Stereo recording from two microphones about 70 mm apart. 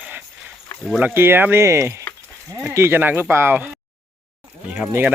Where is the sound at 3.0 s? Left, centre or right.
Right.